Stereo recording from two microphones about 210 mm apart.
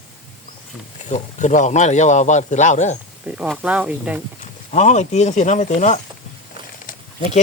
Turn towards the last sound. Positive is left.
turn(degrees=35)  # may be behind; listen again after turning